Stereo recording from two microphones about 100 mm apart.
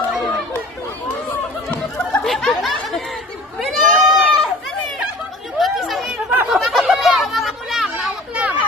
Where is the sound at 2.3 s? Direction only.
5° left (ahead or behind).